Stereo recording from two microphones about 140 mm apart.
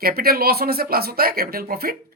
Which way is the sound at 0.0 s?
90° right.